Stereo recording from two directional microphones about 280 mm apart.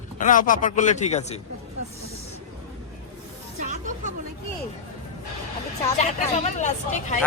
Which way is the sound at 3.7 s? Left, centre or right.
Right.